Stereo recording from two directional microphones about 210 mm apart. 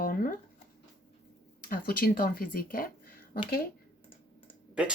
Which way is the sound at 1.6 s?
45° left (ahead or behind).